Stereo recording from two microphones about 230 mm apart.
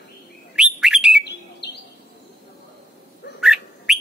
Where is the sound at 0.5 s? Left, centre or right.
Centre.